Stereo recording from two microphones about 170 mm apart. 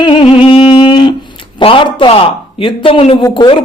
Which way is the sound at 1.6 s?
30° left (ahead or behind).